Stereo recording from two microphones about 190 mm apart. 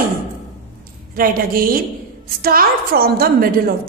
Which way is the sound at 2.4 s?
50° right (ahead or behind).